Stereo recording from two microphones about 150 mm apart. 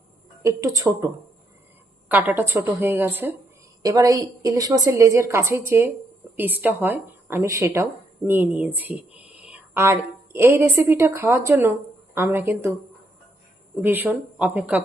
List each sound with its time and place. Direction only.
0.4 s a woman's voice: 20° right (ahead or behind)
2.0 s a woman's voice: 10° right (ahead or behind)
13.8 s a woman's voice: 10° right (ahead or behind)